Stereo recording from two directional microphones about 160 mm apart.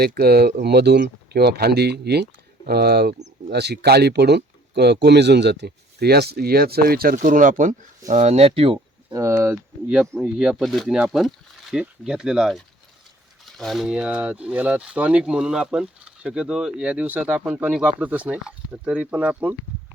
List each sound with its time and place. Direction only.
0.0 s speech: 80° right; by 9.1 s 35° right (ahead or behind)
9.1 s speech: 20° right (ahead or behind)
10.0 s speech: 5° right (ahead or behind)